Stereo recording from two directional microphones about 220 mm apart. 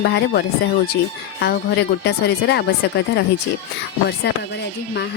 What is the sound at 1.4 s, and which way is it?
Speech, 50° left (ahead or behind).